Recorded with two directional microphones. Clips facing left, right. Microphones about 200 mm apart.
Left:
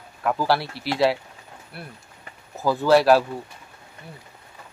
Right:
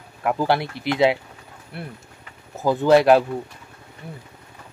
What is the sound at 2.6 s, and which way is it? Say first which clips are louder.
Speech: right 2 dB; 20° right (ahead or behind).